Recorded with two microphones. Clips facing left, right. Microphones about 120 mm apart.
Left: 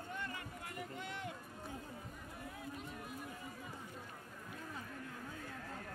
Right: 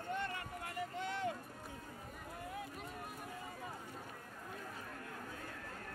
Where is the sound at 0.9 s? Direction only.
30° right (ahead or behind).